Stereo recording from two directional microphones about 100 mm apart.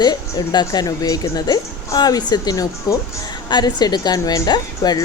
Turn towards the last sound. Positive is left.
turn(degrees=40)  # may be behind; listen again after turning